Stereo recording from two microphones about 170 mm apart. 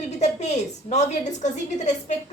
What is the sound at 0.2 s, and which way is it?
A woman's voice, 40° left (ahead or behind).